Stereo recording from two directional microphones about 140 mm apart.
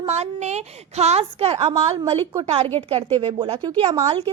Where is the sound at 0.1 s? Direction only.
55° right (ahead or behind); by 4.0 s 30° right (ahead or behind).